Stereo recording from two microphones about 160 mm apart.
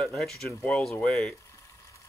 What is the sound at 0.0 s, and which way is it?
Speech, 5° left (ahead or behind).